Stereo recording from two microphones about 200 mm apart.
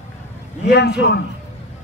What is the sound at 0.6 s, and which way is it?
Speech, 55° left (ahead or behind).